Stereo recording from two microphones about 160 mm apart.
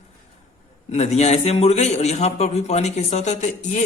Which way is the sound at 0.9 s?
45° left (ahead or behind).